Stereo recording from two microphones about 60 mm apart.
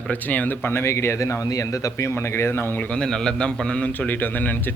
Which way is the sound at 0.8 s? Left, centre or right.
Left.